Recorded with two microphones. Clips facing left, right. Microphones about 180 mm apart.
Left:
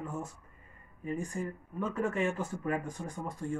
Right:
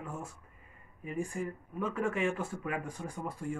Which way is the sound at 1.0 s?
35° left (ahead or behind).